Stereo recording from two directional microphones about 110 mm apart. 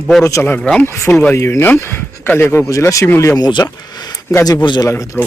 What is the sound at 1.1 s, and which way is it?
Speech, 10° left (ahead or behind).